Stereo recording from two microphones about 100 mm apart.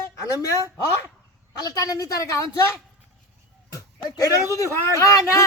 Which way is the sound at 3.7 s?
35° left (ahead or behind).